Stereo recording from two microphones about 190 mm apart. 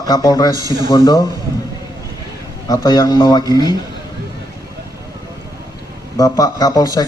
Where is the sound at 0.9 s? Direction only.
25° left (ahead or behind).